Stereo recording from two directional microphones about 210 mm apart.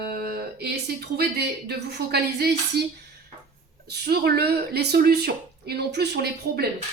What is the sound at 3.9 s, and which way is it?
A woman's voice, 50° right (ahead or behind).